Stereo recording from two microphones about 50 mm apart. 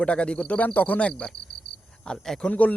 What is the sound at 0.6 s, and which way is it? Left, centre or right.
Speech, left.